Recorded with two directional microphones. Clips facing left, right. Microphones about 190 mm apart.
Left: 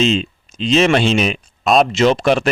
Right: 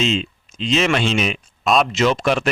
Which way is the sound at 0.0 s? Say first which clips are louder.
Left 4 dB; 35° left (ahead or behind).